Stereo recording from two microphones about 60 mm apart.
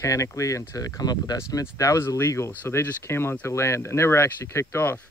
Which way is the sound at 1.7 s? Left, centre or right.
Left.